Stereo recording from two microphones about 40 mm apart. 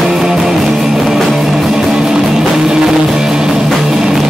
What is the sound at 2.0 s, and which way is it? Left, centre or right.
Music, centre.